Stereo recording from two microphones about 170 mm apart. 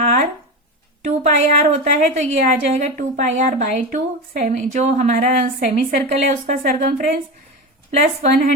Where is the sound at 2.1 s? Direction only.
45° right (ahead or behind).